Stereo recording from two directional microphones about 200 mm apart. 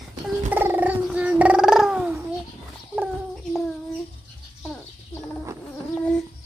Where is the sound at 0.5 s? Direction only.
10° right (ahead or behind).